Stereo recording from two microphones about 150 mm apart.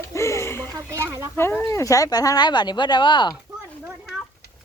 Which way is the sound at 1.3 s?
15° left (ahead or behind).